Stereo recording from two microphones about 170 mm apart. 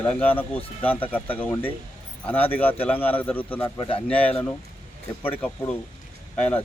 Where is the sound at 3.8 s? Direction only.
30° left (ahead or behind).